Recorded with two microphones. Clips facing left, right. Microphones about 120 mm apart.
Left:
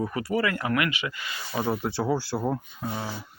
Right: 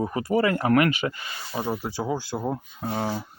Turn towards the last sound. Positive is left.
turn(degrees=-35)  # may be behind; listen again after turning